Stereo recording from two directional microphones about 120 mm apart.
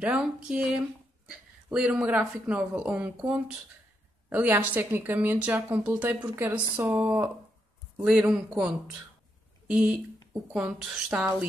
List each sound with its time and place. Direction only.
0.0 s speech: 10° right (ahead or behind)